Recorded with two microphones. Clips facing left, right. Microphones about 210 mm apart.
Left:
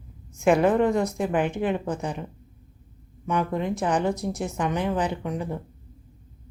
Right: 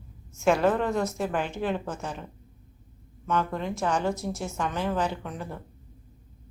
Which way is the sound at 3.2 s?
15° left (ahead or behind).